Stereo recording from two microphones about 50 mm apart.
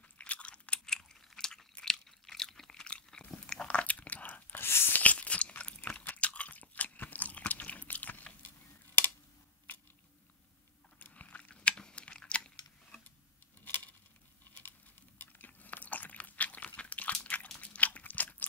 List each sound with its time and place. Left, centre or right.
0.2 s chewing: left
2.8 s biting: centre
3.6 s biting: left
4.6 s a sound: left
4.9 s chewing: left
11.0 s chewing: left
13.7 s a sound: left
15.1 s chewing: left
17.6 s biting: left